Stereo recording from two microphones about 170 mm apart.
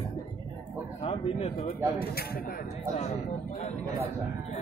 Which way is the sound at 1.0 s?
35° left (ahead or behind).